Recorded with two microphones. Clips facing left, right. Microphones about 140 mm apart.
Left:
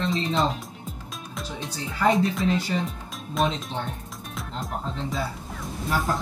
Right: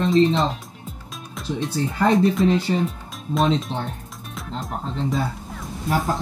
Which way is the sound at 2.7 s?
35° right (ahead or behind).